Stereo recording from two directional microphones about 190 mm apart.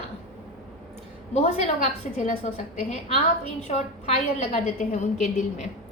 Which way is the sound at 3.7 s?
35° left (ahead or behind).